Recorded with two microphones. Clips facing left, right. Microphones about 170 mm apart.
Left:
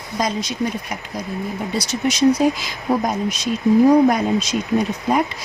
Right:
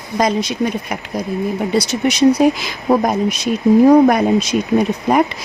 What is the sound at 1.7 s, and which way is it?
Speech, 65° right (ahead or behind).